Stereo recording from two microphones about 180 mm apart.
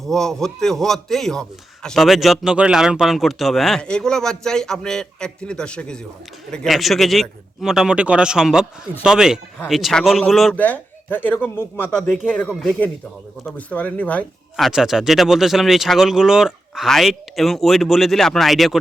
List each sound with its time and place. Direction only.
0.0 s a man's voice: centre (ahead or behind)